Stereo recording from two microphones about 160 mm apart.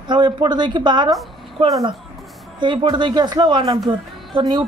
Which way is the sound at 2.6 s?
30° right (ahead or behind).